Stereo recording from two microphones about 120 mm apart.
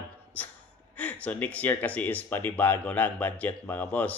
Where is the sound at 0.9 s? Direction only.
10° left (ahead or behind).